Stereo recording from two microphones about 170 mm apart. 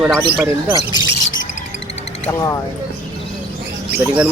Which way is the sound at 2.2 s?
20° left (ahead or behind).